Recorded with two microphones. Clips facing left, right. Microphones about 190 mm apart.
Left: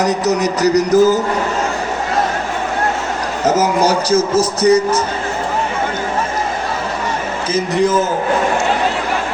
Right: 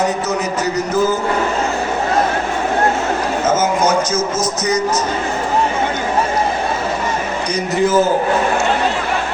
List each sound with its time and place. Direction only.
0.0 s speech: 40° left (ahead or behind)
3.4 s speech: 35° left (ahead or behind)
7.5 s a man's voice: centre (ahead or behind)